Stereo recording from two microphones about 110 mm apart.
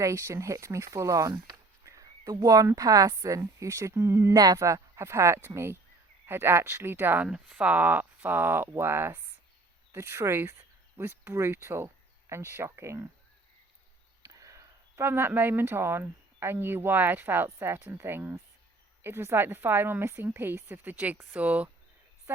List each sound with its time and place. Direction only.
0.0 s a woman's voice: 30° right (ahead or behind)
7.3 s a woman's voice: 5° right (ahead or behind); by 13.1 s 25° right (ahead or behind)
14.2 s a woman's voice: 30° right (ahead or behind); by 21.7 s 15° right (ahead or behind)